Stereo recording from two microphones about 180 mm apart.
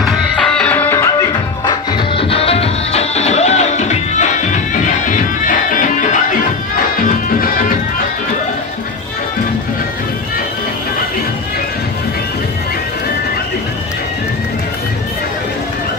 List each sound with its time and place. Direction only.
0.0 s music: 5° left (ahead or behind)
1.7 s music: 30° left (ahead or behind); by 7.6 s 50° left (ahead or behind)